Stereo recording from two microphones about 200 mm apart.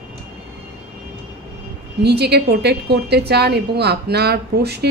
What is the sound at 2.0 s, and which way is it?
A woman's voice, 55° right (ahead or behind).